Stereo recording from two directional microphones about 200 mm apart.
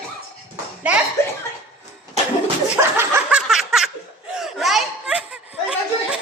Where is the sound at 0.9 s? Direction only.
5° right (ahead or behind).